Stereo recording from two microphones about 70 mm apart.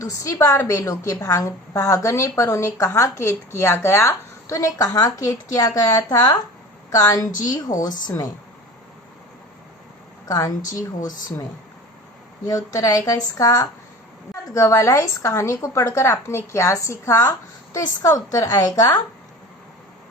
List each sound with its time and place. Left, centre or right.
0.0 s a woman's voice: left
6.1 s speech: left
6.9 s a woman's voice: left
10.2 s a woman's voice: left
12.5 s a woman's voice: left